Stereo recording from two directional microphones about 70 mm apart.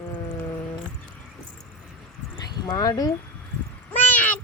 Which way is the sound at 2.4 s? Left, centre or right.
Left.